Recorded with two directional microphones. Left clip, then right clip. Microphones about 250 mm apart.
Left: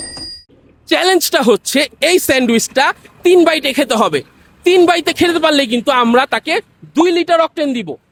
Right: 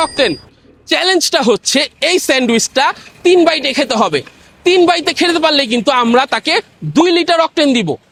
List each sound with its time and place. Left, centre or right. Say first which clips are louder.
0.9 s a woman's voice: even; centre
5.8 s speech: even; centre
6.4 s speech: right 3 dB; centre